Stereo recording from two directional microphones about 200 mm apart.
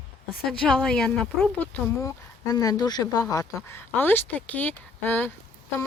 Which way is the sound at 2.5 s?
15° left (ahead or behind).